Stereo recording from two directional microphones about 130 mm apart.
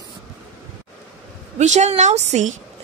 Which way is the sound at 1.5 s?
65° right (ahead or behind).